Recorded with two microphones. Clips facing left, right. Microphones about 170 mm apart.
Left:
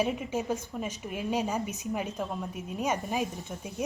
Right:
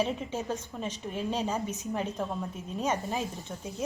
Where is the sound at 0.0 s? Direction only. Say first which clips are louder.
Left 1 dB; 10° left (ahead or behind).